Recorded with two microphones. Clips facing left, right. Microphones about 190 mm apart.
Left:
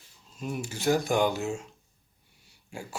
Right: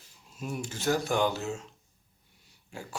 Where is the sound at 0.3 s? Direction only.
Centre (ahead or behind).